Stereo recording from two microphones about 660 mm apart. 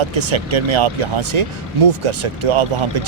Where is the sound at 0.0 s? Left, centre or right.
Right.